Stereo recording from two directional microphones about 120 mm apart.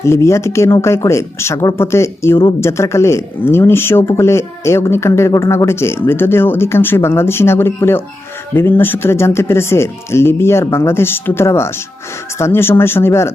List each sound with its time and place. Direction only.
0.0 s speech: 25° left (ahead or behind)